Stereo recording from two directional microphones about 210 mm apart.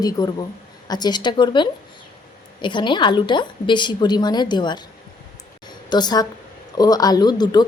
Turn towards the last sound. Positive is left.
turn(degrees=20)  # may be behind; listen again after turning